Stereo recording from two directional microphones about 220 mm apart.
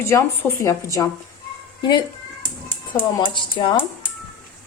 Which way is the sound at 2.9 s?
20° left (ahead or behind).